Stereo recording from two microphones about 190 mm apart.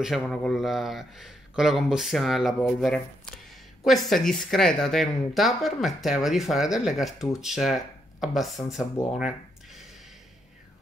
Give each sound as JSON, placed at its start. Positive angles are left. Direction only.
{"t": 0.0, "sound": "speech", "side_deg": 0}